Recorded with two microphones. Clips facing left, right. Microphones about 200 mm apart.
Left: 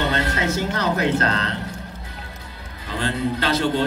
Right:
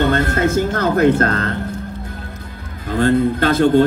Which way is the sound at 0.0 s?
50° right (ahead or behind).